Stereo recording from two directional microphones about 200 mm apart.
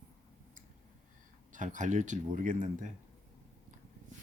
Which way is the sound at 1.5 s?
40° right (ahead or behind).